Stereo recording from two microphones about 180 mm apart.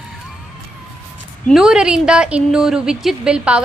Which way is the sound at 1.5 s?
5° right (ahead or behind).